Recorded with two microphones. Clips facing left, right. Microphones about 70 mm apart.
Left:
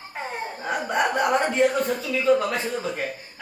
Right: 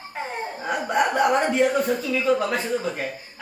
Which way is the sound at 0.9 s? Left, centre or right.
Centre.